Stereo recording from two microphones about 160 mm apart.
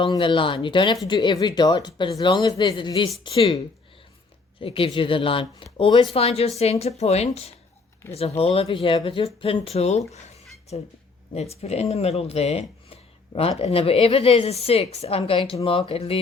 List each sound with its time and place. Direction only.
0.0 s speech: 30° left (ahead or behind)
4.6 s speech: 35° left (ahead or behind)